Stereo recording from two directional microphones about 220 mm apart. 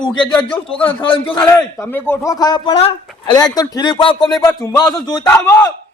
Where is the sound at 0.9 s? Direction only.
25° left (ahead or behind).